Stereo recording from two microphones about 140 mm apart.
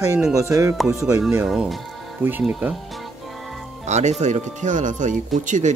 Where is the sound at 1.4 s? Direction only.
5° right (ahead or behind).